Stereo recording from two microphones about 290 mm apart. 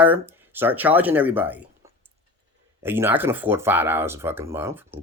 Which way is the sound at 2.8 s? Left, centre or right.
Centre.